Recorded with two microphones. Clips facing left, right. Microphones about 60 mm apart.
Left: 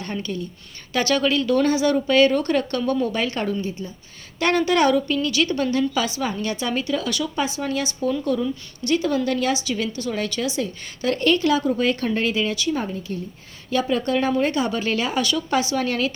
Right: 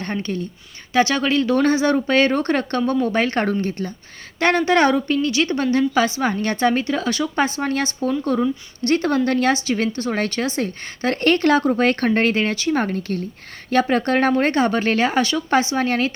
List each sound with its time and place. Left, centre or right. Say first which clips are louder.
0.0 s a woman's voice: right 3 dB; right
4.4 s a woman's voice: right 3 dB; right
12.7 s a woman's voice: right 5 dB; right
13.7 s speech: right 4 dB; right